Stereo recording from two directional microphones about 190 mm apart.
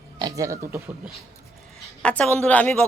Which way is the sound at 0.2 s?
20° right (ahead or behind).